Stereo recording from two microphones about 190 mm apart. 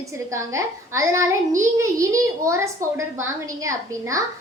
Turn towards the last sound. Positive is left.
turn(degrees=-15)  # may be behind; listen again after turning